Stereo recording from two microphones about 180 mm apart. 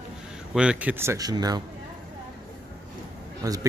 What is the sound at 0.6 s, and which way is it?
A man's voice, 5° right (ahead or behind).